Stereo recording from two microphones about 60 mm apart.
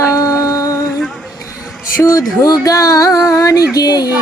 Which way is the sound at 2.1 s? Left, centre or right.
Left.